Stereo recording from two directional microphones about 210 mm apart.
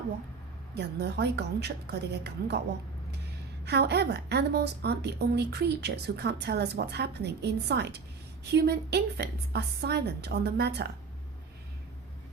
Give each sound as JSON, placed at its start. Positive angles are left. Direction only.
{"t": 0.7, "sound": "a woman's voice", "side_deg": -55}
{"t": 3.7, "sound": "a woman's voice", "side_deg": -50}